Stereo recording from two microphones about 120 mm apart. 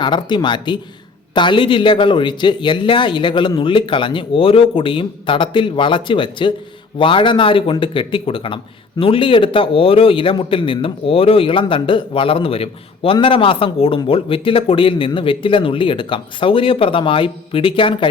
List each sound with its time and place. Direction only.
0.0 s a man's voice: 40° left (ahead or behind)